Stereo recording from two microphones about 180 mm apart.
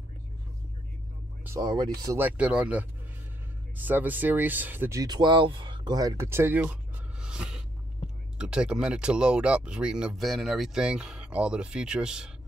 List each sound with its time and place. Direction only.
1.6 s speech: 25° right (ahead or behind)
2.1 s speech: 10° right (ahead or behind)